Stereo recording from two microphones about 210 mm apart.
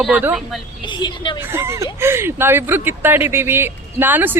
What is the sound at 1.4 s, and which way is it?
Speech, 10° right (ahead or behind).